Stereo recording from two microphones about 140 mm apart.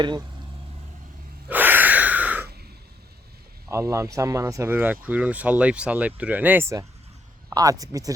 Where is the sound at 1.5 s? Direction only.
15° right (ahead or behind).